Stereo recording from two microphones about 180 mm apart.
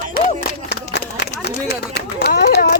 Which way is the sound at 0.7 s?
65° left (ahead or behind).